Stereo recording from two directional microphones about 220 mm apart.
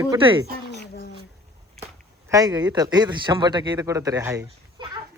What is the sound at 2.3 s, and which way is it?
Speech, 15° right (ahead or behind).